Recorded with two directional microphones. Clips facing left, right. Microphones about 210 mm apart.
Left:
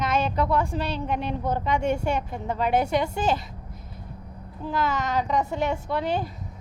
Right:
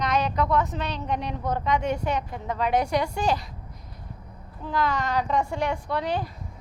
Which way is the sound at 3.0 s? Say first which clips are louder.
Left 1 dB; 25° left (ahead or behind).